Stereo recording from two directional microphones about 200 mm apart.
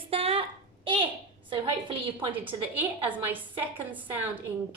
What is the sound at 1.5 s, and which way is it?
Speech, 25° right (ahead or behind).